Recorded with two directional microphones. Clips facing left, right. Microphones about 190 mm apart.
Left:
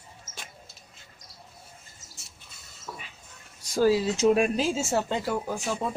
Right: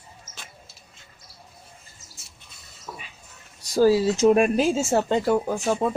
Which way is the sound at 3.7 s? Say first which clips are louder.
Right 4 dB; 40° right (ahead or behind).